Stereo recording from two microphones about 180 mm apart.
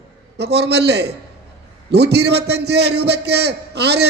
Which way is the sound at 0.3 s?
65° right (ahead or behind).